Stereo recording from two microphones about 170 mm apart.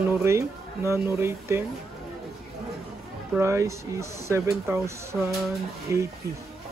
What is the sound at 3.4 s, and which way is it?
Speech, 15° right (ahead or behind).